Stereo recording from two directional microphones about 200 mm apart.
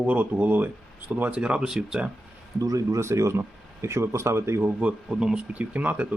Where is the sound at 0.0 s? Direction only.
10° right (ahead or behind).